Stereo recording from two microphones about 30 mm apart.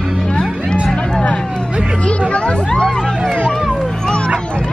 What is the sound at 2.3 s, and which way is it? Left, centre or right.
Speech, left.